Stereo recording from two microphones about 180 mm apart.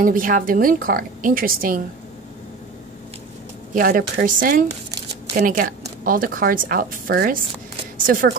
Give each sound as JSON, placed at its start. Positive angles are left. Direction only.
{"t": 0.0, "sound": "speech", "side_deg": -50}
{"t": 3.7, "sound": "speech", "side_deg": -55}